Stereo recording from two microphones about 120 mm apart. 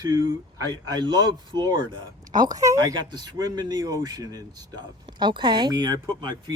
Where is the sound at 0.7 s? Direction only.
40° right (ahead or behind).